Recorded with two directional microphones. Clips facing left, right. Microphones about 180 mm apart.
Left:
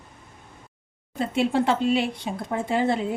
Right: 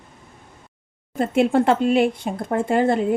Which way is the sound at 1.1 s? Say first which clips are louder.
Right 5 dB; 55° right (ahead or behind).